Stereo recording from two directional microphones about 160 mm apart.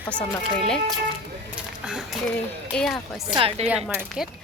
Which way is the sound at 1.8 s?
5° right (ahead or behind).